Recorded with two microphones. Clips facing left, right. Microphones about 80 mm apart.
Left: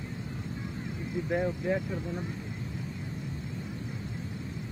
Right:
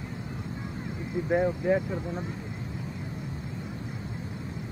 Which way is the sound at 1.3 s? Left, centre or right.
Right.